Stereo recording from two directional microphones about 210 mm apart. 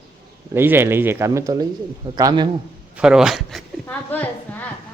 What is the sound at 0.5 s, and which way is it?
Speech, 10° right (ahead or behind).